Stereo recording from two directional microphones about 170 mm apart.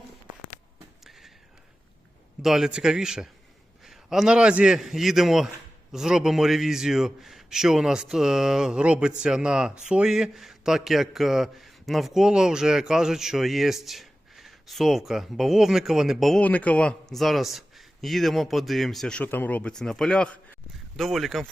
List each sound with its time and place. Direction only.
2.4 s a man's voice: centre (ahead or behind)